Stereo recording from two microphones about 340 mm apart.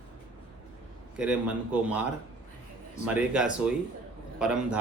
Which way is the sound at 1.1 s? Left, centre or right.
Centre.